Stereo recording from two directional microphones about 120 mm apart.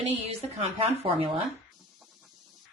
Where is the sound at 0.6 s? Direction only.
55° right (ahead or behind).